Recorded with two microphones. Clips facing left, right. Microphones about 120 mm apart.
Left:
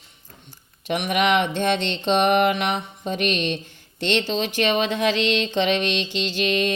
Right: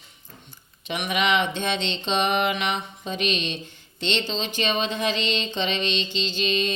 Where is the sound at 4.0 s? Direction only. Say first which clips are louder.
Left 4 dB; 70° left (ahead or behind).